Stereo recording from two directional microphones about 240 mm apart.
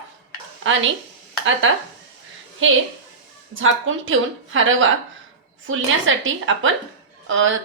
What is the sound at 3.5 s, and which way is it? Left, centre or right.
A woman's voice, right.